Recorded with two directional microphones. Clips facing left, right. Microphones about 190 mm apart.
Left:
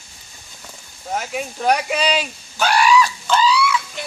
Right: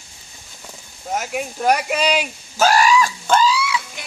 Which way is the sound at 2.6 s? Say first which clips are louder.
Right 1 dB; 40° right (ahead or behind).